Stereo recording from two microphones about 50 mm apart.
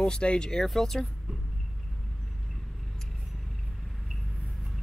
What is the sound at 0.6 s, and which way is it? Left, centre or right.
Speech, centre.